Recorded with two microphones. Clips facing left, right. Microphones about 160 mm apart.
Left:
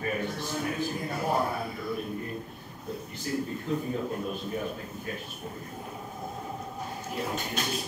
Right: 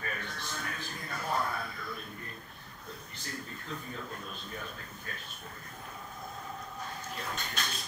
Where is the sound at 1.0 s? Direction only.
25° left (ahead or behind).